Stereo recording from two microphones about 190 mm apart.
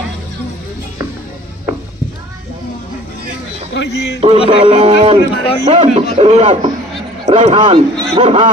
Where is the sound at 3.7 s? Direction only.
65° left (ahead or behind).